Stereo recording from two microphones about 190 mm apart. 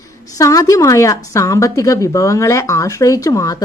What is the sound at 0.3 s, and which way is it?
A woman's voice, 15° left (ahead or behind).